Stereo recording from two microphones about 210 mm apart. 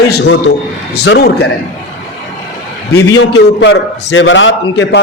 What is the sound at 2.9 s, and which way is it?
A man's voice, 55° left (ahead or behind).